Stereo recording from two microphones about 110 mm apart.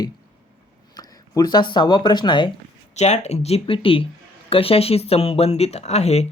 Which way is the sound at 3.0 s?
90° left.